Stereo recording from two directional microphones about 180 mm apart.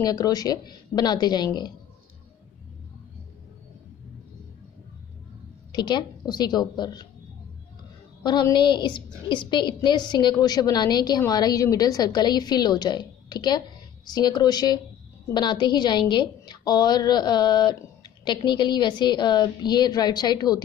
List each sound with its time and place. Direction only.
0.0 s a woman's voice: 20° left (ahead or behind)
5.7 s a woman's voice: 25° left (ahead or behind)
8.2 s a woman's voice: 25° left (ahead or behind)